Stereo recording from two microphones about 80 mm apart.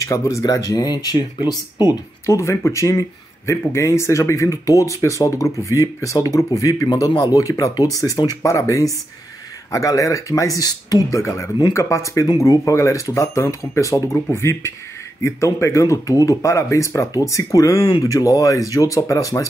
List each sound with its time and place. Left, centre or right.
0.0 s speech: left
2.2 s speech: left